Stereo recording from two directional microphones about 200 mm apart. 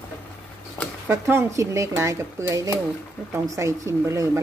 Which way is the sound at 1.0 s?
15° right (ahead or behind).